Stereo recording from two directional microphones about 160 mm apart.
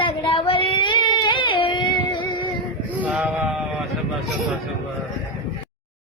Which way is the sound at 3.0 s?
5° right (ahead or behind).